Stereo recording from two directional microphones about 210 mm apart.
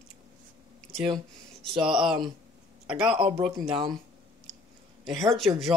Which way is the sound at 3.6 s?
20° right (ahead or behind).